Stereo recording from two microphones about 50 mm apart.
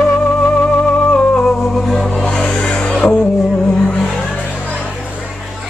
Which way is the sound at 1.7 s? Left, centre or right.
Centre.